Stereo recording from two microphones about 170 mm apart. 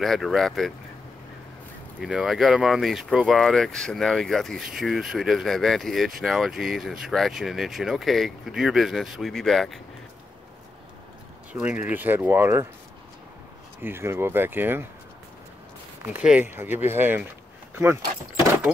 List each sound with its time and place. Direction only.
0.0 s speech: centre (ahead or behind)
2.0 s speech: 5° right (ahead or behind)
11.5 s speech: 10° right (ahead or behind)
13.8 s speech: 15° right (ahead or behind)
16.1 s speech: 10° right (ahead or behind)